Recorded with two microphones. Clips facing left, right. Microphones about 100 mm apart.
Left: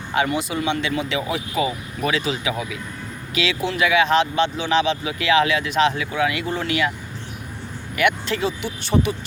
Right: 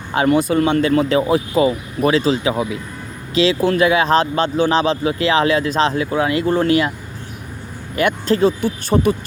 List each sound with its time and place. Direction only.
0.3 s speech: 45° right (ahead or behind)
7.9 s speech: 35° right (ahead or behind)